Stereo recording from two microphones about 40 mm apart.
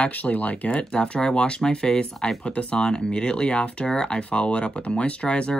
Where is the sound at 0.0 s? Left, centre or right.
Left.